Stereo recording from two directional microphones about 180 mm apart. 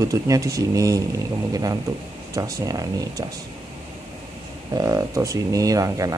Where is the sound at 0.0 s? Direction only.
20° right (ahead or behind).